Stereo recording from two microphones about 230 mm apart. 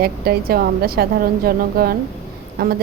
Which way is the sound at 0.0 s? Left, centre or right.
Right.